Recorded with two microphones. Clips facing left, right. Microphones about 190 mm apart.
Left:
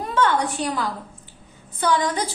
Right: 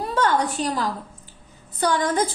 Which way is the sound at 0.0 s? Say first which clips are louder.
Even; 35° right (ahead or behind).